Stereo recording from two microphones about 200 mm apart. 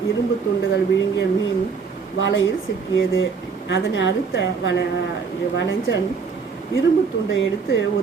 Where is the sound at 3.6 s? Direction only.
65° left (ahead or behind).